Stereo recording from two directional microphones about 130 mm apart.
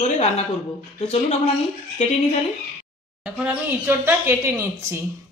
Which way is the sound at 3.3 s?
15° right (ahead or behind).